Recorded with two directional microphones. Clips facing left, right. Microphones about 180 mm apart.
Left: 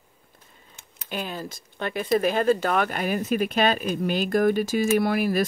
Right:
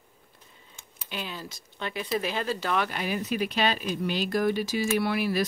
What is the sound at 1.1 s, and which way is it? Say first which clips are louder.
Speech: left 5 dB; 50° left (ahead or behind).